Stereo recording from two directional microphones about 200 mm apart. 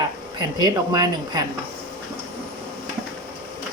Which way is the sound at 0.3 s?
20° right (ahead or behind).